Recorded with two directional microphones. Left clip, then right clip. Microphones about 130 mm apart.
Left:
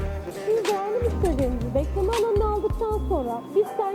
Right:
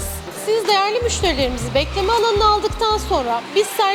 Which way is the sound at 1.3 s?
45° left (ahead or behind).